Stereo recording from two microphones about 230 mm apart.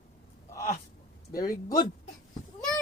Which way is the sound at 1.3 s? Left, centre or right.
Centre.